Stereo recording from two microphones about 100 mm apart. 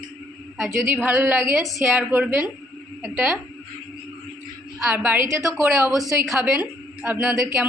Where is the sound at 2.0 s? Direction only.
20° right (ahead or behind).